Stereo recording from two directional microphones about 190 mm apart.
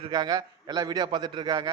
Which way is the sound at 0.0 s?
20° right (ahead or behind).